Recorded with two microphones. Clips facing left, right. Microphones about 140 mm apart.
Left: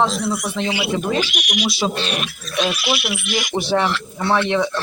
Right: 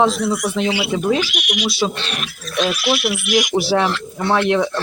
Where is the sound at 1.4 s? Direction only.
40° left (ahead or behind).